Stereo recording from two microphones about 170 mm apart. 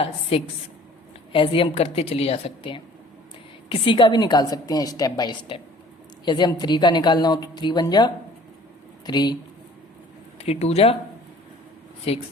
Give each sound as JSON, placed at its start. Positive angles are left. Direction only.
{"t": 0.0, "sound": "a woman's voice", "side_deg": 35}
{"t": 10.3, "sound": "speech", "side_deg": 35}
{"t": 12.1, "sound": "a woman's voice", "side_deg": 35}